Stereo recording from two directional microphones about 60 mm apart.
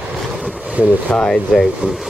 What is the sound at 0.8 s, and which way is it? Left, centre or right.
Speech, right.